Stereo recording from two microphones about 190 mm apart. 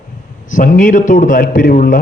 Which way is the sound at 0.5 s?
45° left (ahead or behind).